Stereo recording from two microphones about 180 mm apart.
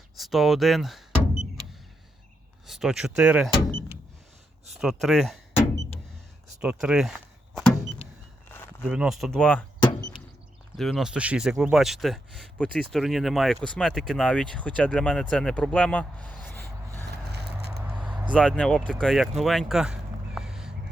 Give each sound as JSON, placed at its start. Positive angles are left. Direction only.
{"t": 0.2, "sound": "speech", "side_deg": 0}
{"t": 2.6, "sound": "speech", "side_deg": 0}
{"t": 4.8, "sound": "speech", "side_deg": 0}
{"t": 5.5, "sound": "a sound", "side_deg": 15}
{"t": 6.6, "sound": "speech", "side_deg": -5}
{"t": 7.5, "sound": "vehicle", "side_deg": 0}
{"t": 8.9, "sound": "speech", "side_deg": -5}
{"t": 9.8, "sound": "a sound", "side_deg": 25}
{"t": 10.8, "sound": "speech", "side_deg": 0}
{"t": 17.1, "sound": "a sound", "side_deg": -65}
{"t": 18.3, "sound": "speech", "side_deg": 5}